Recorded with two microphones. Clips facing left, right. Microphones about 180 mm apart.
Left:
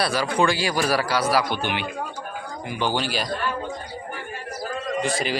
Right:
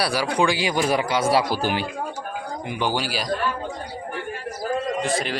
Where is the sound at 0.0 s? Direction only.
10° right (ahead or behind); by 1.9 s 35° right (ahead or behind).